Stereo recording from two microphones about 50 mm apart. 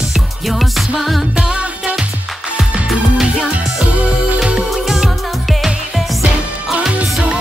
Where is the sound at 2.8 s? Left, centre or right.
Centre.